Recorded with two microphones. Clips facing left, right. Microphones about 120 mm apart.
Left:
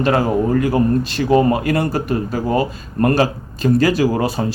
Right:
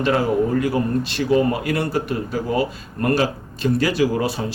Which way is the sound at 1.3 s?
45° left (ahead or behind).